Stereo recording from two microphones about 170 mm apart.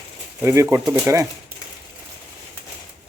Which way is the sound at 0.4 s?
15° right (ahead or behind).